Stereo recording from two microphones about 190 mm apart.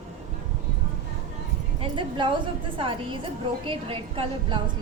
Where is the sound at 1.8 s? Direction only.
25° right (ahead or behind).